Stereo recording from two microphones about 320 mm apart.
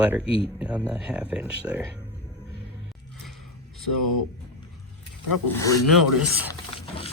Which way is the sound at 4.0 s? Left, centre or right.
Left.